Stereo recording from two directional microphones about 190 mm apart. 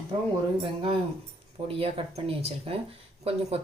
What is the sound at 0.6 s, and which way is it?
Speech, 30° right (ahead or behind).